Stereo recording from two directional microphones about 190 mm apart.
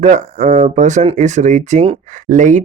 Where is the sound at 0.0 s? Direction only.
40° right (ahead or behind).